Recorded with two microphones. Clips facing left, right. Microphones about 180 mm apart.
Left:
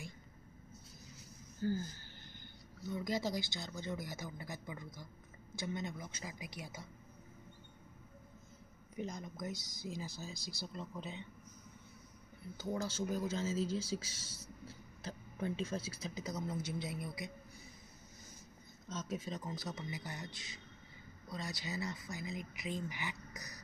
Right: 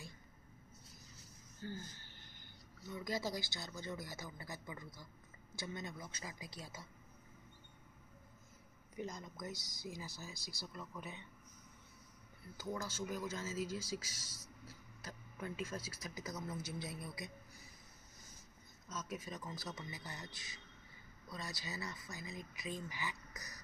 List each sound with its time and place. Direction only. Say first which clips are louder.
1.6 s speech: left 11 dB; 40° left (ahead or behind)
2.9 s speech: left 4 dB; 20° left (ahead or behind)
8.9 s speech: left 3 dB; 20° left (ahead or behind)
12.7 s speech: left 6 dB; 65° left (ahead or behind)
13.1 s speech: left 6 dB; 30° left (ahead or behind)
18.9 s speech: left 4 dB; 25° left (ahead or behind)